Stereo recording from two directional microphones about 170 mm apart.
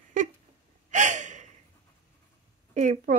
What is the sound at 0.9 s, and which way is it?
Gasp, 45° right (ahead or behind).